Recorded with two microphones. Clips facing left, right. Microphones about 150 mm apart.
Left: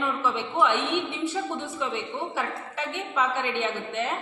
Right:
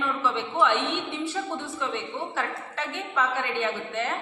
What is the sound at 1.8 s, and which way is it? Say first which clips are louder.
A woman's voice: left 1 dB; 15° left (ahead or behind).